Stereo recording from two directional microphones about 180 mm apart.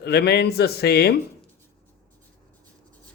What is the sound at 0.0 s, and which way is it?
Speech, 65° left (ahead or behind).